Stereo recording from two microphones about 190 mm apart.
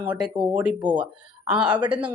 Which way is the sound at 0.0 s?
10° right (ahead or behind).